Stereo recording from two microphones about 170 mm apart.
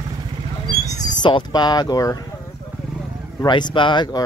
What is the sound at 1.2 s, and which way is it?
Speech, 25° left (ahead or behind).